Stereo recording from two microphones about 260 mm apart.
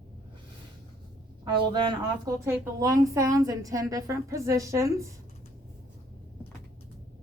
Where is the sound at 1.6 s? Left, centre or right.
Centre.